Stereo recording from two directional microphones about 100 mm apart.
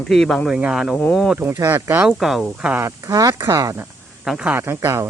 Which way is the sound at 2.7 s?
30° right (ahead or behind).